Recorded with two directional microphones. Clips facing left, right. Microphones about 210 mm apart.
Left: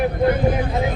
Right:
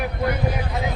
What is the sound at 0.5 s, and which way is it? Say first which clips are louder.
Speech: left 5 dB; 25° left (ahead or behind).